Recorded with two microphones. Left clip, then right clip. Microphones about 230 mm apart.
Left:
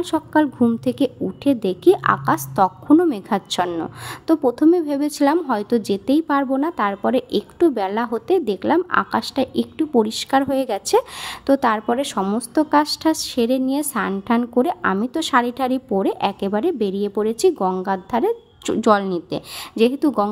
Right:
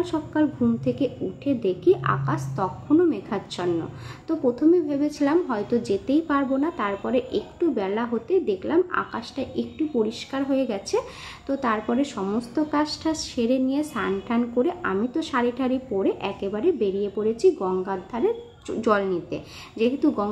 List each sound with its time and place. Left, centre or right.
0.0 s a woman's voice: left